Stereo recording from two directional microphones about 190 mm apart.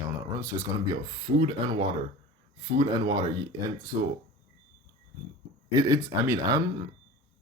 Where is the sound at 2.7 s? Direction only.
25° right (ahead or behind).